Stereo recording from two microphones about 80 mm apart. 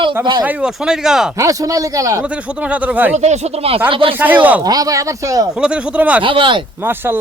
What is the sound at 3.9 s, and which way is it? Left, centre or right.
Speech, right.